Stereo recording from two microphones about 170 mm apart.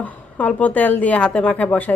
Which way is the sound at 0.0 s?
10° left (ahead or behind).